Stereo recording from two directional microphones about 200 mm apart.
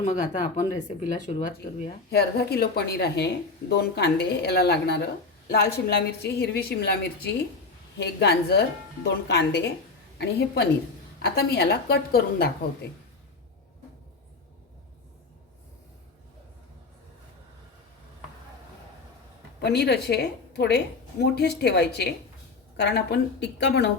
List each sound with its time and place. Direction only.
0.0 s speech: 35° left (ahead or behind)
2.0 s a woman's voice: 55° left (ahead or behind)
19.6 s a woman's voice: 55° left (ahead or behind)